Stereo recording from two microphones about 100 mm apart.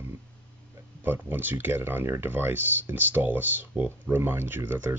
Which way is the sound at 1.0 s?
20° right (ahead or behind).